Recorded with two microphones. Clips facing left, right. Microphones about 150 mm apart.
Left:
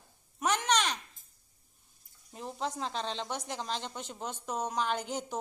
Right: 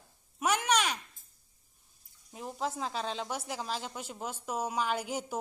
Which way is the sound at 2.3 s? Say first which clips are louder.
Right 1 dB; 5° right (ahead or behind).